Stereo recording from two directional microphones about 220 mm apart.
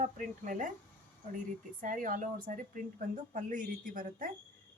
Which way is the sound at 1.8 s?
40° right (ahead or behind).